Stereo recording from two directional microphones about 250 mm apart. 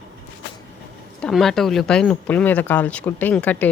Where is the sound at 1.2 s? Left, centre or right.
Centre.